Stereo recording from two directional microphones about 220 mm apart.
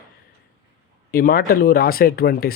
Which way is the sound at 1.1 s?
40° left (ahead or behind).